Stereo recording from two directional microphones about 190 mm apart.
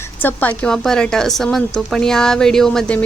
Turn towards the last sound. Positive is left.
turn(degrees=5)  # may be behind; listen again after turning